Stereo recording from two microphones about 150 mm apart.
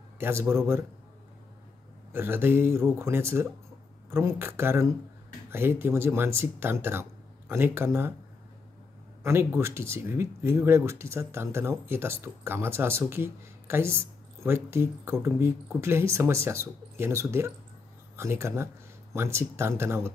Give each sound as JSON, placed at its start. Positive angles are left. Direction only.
{"t": 0.2, "sound": "speech", "side_deg": -15}
{"t": 2.1, "sound": "speech", "side_deg": -15}
{"t": 9.2, "sound": "speech", "side_deg": -15}